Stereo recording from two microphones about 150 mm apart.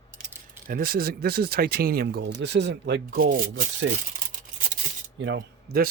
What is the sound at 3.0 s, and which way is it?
Speech, 75° right (ahead or behind).